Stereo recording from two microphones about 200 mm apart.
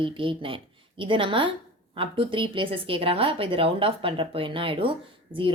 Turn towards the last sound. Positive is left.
turn(degrees=-25)  # may be behind; listen again after turning